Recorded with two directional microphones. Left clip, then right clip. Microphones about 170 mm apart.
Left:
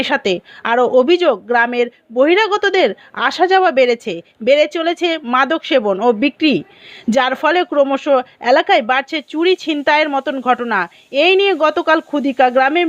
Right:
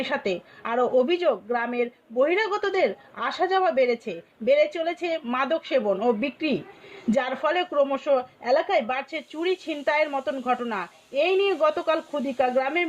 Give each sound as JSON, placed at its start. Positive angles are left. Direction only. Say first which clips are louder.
{"t": 0.0, "sound": "a woman's voice", "louder": "left 10 dB", "side_deg": 35}